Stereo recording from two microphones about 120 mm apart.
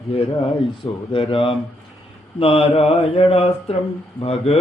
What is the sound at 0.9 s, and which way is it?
Speech, 50° left (ahead or behind).